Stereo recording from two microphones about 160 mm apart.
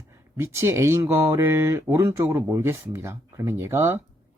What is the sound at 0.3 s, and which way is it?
Speech, 15° right (ahead or behind).